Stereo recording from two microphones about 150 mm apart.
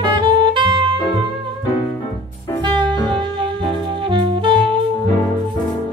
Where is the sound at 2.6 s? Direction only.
30° right (ahead or behind).